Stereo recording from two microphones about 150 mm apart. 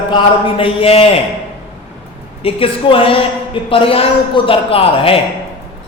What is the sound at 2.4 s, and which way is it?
A man's voice, 35° left (ahead or behind).